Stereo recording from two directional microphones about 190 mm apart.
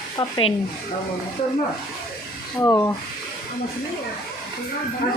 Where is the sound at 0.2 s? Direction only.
25° left (ahead or behind).